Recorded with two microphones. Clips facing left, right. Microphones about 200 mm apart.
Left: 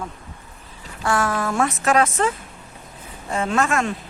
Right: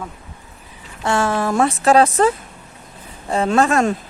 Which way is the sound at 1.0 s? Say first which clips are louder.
Right 3 dB; 25° right (ahead or behind).